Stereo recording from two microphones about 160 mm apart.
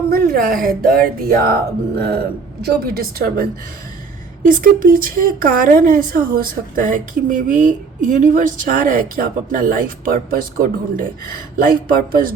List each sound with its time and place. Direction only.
0.1 s speech: 65° right (ahead or behind)
4.4 s speech: 55° right (ahead or behind)